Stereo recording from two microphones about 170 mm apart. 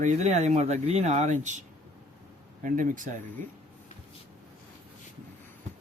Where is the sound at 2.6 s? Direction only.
50° right (ahead or behind).